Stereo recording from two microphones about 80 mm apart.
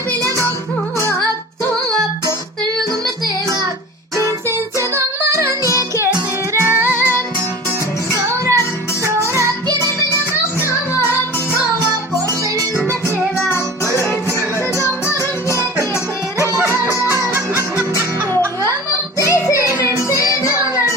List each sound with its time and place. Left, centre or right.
4.2 s music: right
6.8 s music: left
8.1 s music: right
14.8 s music: left
16.8 s music: right
19.2 s music: left